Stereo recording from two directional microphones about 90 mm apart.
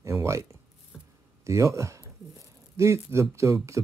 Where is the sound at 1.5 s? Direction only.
35° right (ahead or behind).